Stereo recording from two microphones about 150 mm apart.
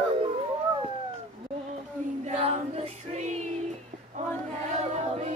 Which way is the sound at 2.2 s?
40° right (ahead or behind).